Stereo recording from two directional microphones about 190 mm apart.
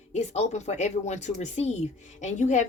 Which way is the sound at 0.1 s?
35° left (ahead or behind).